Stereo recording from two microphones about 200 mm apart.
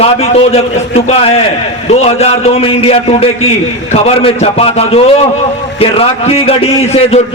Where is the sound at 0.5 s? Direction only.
30° left (ahead or behind).